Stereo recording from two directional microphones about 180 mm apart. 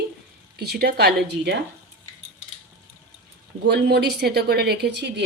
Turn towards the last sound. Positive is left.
turn(degrees=-70)  # may be behind; listen again after turning